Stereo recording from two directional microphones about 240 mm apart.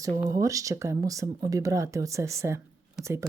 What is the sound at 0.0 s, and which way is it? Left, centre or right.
Speech, centre.